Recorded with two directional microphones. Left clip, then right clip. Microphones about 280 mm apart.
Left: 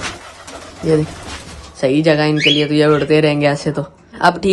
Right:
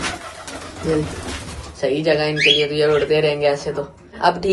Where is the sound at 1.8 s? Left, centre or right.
Centre.